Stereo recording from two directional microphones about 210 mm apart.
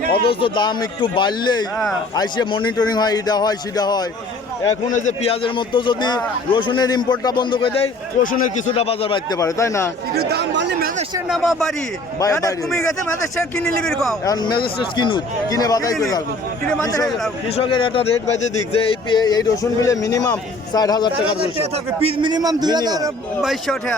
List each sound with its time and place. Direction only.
0.3 s a man's voice: 20° left (ahead or behind)
4.9 s a man's voice: 30° left (ahead or behind)
8.2 s speech: 40° left (ahead or behind)
8.7 s a man's voice: 25° left (ahead or behind)
10.2 s speech: 50° right (ahead or behind)
11.3 s speech: centre (ahead or behind)
12.2 s a man's voice: 15° left (ahead or behind)
12.7 s speech: centre (ahead or behind)
14.3 s a man's voice: 20° left (ahead or behind)
21.6 s a man's voice: 25° right (ahead or behind)
23.4 s speech: centre (ahead or behind)